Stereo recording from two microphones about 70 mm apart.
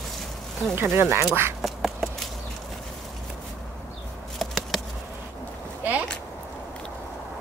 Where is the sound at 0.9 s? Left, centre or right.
Right.